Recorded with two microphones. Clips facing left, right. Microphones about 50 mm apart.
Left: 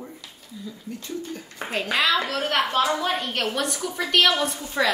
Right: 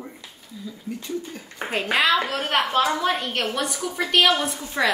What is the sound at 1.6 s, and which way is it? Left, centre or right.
Speech, right.